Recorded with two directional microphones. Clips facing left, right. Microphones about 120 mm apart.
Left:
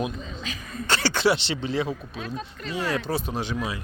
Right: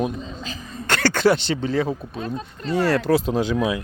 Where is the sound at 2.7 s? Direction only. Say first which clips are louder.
Right 8 dB; 70° right (ahead or behind).